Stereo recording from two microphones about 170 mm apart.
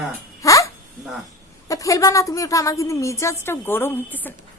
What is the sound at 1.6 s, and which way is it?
Speech, 20° left (ahead or behind).